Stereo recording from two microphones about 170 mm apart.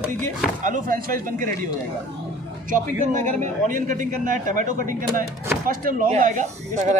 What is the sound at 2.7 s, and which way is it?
Speech, 45° right (ahead or behind).